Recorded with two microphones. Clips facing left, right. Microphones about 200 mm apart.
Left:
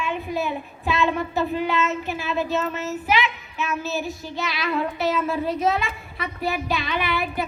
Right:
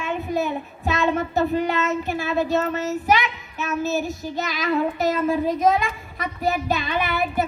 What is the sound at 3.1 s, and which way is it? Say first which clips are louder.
A child's voice: even; 40° right (ahead or behind).